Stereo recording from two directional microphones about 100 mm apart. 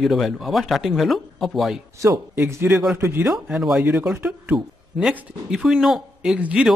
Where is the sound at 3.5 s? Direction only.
Centre (ahead or behind).